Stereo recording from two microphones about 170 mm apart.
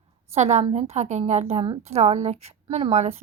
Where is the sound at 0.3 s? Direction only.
40° right (ahead or behind).